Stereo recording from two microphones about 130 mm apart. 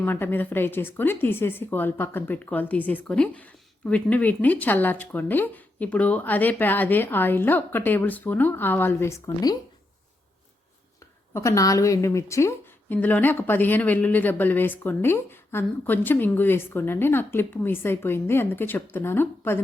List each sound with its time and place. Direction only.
0.0 s speech: 15° left (ahead or behind)
9.2 s speech: 30° left (ahead or behind)
11.3 s speech: 25° left (ahead or behind)